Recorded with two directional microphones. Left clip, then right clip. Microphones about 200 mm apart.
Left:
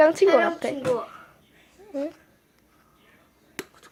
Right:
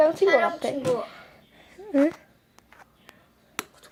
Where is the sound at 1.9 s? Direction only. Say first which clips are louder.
Right 9 dB; 45° right (ahead or behind).